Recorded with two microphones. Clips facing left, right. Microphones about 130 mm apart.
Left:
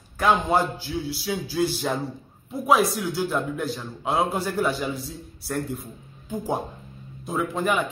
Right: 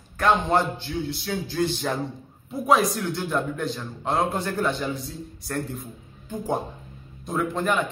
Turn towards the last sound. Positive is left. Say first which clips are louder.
# even
turn(degrees=5)  # may be behind; listen again after turning